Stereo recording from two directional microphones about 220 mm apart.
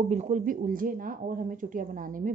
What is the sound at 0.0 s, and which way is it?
Speech, 30° right (ahead or behind).